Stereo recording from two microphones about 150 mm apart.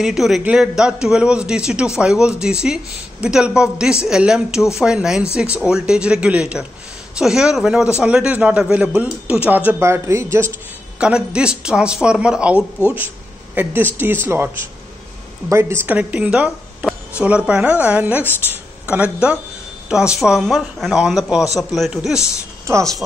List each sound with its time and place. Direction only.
0.0 s a man's voice: centre (ahead or behind); by 10.5 s 20° right (ahead or behind)
11.0 s a woman's voice: 5° right (ahead or behind)
15.5 s a woman's voice: 15° right (ahead or behind)